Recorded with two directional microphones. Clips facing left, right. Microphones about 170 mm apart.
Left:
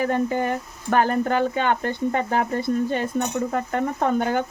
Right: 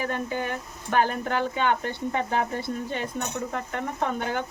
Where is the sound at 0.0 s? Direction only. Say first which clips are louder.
Left 7 dB; 45° left (ahead or behind).